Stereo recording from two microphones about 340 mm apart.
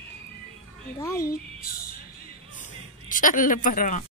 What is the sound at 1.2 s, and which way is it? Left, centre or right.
Speech, left.